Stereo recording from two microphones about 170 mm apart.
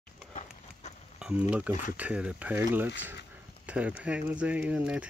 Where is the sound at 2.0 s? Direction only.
5° right (ahead or behind).